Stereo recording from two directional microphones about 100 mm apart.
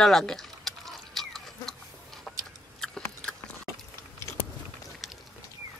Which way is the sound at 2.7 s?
5° left (ahead or behind).